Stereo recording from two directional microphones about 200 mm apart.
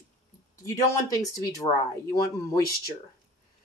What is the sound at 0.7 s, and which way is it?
Speech, 15° left (ahead or behind).